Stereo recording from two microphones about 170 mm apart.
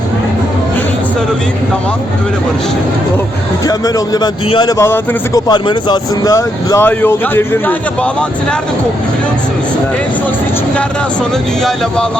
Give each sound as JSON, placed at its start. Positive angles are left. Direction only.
{"t": 3.7, "sound": "speech", "side_deg": 20}
{"t": 4.8, "sound": "speech", "side_deg": 20}